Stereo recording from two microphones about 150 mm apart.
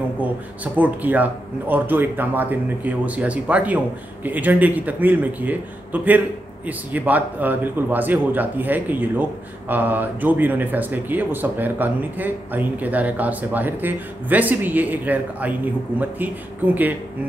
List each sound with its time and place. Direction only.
0.7 s a man's voice: 10° right (ahead or behind)